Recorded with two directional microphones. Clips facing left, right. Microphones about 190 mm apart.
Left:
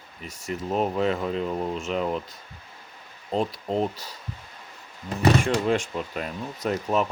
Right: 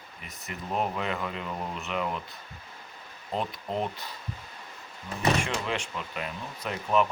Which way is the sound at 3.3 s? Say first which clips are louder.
Left 6 dB; 35° left (ahead or behind).